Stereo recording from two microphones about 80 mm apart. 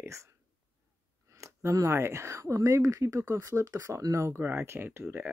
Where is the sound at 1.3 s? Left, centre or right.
Right.